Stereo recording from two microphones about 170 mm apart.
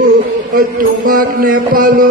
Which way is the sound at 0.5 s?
55° right (ahead or behind).